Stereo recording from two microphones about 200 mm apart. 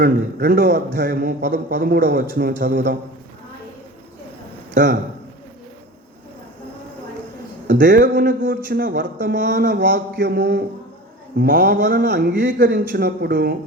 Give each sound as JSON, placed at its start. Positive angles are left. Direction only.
{"t": 0.0, "sound": "a man's voice", "side_deg": -50}
{"t": 4.7, "sound": "a man's voice", "side_deg": -60}
{"t": 8.1, "sound": "speech", "side_deg": -60}
{"t": 8.8, "sound": "speech", "side_deg": -50}
{"t": 12.5, "sound": "a man's voice", "side_deg": -45}